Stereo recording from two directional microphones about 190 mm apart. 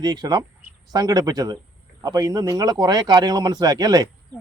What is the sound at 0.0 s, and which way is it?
Speech, 20° right (ahead or behind).